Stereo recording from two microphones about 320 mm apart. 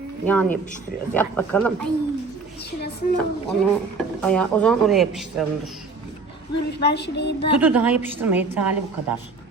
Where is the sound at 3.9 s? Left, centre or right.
Centre.